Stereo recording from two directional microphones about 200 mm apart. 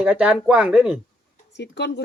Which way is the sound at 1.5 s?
60° left (ahead or behind).